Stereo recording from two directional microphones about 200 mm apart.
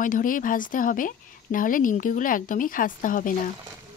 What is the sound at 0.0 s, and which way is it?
Speech, 45° left (ahead or behind).